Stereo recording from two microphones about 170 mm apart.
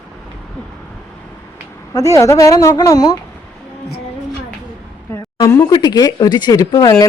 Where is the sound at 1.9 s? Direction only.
20° left (ahead or behind).